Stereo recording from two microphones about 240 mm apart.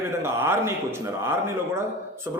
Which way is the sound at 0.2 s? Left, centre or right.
Centre.